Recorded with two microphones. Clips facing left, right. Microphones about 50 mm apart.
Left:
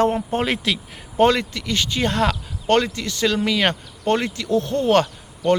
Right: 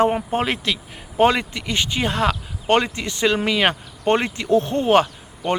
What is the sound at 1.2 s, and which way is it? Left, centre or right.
Speech, centre.